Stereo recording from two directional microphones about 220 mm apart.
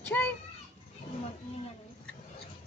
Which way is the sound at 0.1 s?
10° left (ahead or behind).